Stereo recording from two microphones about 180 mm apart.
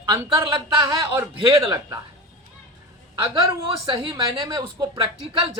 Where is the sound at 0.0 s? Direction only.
15° right (ahead or behind).